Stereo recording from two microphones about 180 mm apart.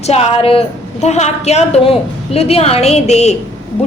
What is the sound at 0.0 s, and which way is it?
A woman's voice, 35° left (ahead or behind).